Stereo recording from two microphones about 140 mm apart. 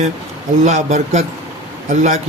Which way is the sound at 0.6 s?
55° right (ahead or behind).